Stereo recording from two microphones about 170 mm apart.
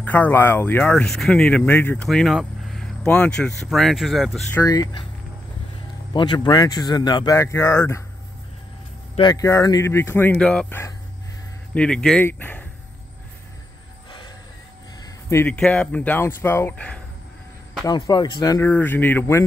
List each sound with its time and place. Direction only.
0.0 s speech: 10° left (ahead or behind)
2.0 s speech: centre (ahead or behind)
4.5 s speech: 15° left (ahead or behind)
6.1 s speech: 25° left (ahead or behind)
9.1 s speech: 25° left (ahead or behind); by 12.6 s 10° left (ahead or behind)
15.0 s a sound: 15° left (ahead or behind)
15.5 s speech: 5° left (ahead or behind)
17.8 s speech: 25° left (ahead or behind)